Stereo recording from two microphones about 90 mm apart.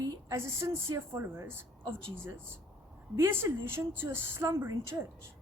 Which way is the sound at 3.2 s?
30° right (ahead or behind).